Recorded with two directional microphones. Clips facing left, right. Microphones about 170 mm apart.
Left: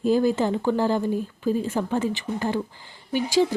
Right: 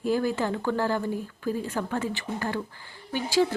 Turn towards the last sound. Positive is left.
turn(degrees=15)  # may be behind; listen again after turning